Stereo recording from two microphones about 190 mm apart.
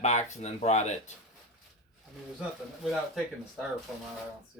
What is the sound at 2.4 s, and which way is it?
Speech, centre (ahead or behind).